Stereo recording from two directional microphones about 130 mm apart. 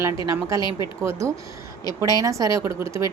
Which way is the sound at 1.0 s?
25° right (ahead or behind).